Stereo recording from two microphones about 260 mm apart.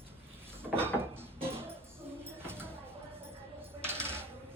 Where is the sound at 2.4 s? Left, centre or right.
Centre.